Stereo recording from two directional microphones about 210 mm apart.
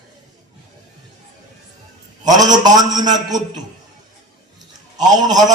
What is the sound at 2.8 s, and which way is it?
Speech, 20° right (ahead or behind).